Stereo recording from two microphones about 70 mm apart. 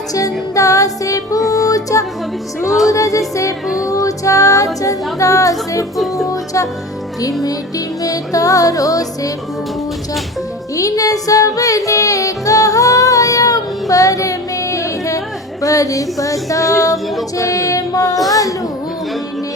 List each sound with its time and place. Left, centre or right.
0.1 s music: left
2.9 s female singing: left
3.8 s music: left
8.0 s music: left
10.8 s music: left
15.6 s female singing: left